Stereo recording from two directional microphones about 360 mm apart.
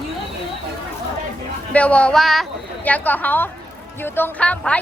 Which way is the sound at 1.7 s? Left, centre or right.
Centre.